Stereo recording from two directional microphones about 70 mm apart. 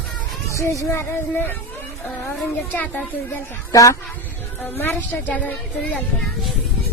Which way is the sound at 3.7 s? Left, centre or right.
Left.